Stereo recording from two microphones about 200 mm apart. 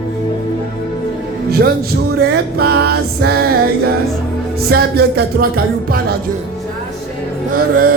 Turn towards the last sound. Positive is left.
turn(degrees=-45)  # may be behind; listen again after turning